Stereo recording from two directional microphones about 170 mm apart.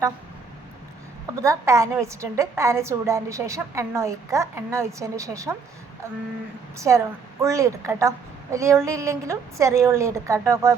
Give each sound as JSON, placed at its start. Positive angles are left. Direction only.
{"t": 1.4, "sound": "a woman's voice", "side_deg": -20}
{"t": 6.7, "sound": "a woman's voice", "side_deg": -20}